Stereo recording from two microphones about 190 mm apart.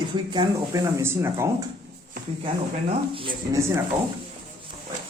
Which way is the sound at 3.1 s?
25° right (ahead or behind).